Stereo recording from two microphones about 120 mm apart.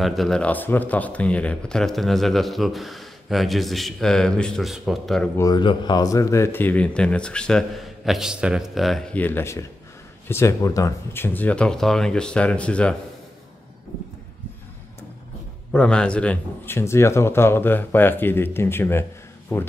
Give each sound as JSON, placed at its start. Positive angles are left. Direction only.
{"t": 0.0, "sound": "speech", "side_deg": 0}
{"t": 5.4, "sound": "speech", "side_deg": 35}
{"t": 9.1, "sound": "speech", "side_deg": 15}
{"t": 15.7, "sound": "speech", "side_deg": 5}
{"t": 16.7, "sound": "speech", "side_deg": 20}